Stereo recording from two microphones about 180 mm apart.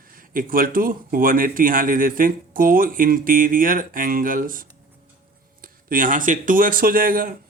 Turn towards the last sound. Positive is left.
turn(degrees=-50)  # may be behind; listen again after turning